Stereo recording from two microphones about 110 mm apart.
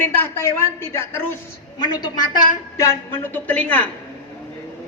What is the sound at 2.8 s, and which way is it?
A woman's voice, 20° left (ahead or behind).